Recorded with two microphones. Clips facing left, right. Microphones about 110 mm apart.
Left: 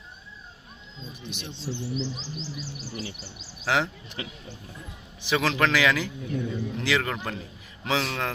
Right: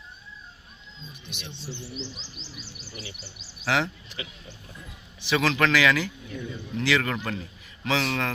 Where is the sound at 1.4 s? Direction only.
40° left (ahead or behind).